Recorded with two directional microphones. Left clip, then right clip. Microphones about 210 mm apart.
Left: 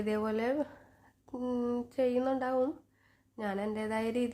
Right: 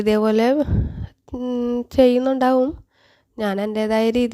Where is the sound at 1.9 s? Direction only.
50° right (ahead or behind).